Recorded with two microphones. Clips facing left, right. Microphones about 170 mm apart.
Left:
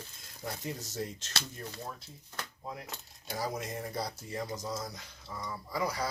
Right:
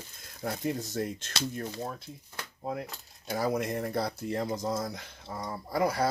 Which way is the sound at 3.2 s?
60° right (ahead or behind).